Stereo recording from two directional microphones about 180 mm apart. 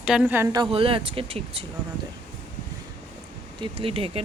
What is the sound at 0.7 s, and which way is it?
Speech, 30° right (ahead or behind).